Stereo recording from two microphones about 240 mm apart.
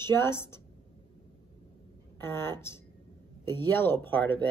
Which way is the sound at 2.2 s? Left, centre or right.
Centre.